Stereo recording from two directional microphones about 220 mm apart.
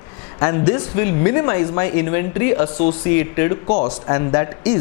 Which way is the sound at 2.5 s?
30° left (ahead or behind).